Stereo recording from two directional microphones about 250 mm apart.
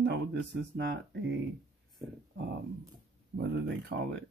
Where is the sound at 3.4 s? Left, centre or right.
Right.